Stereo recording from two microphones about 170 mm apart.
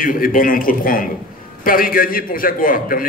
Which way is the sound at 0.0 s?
55° left (ahead or behind).